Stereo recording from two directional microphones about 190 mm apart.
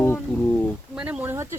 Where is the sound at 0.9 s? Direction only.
5° right (ahead or behind).